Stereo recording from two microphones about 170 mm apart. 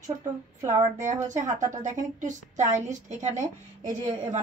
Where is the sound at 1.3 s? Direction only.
45° right (ahead or behind).